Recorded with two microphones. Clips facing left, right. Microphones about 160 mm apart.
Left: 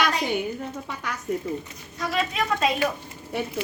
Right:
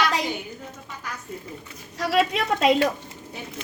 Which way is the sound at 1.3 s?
70° left (ahead or behind).